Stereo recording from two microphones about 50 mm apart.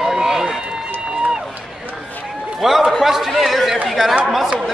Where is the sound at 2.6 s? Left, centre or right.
Centre.